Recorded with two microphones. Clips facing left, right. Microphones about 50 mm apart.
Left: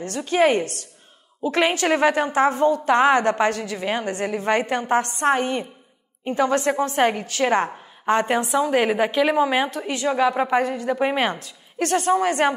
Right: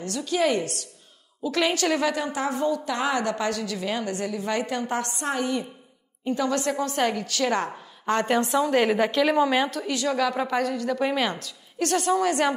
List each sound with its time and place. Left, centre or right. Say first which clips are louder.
0.0 s a woman's voice: left 5 dB; left